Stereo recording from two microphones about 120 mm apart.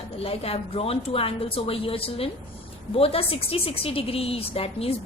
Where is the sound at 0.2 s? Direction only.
55° left (ahead or behind).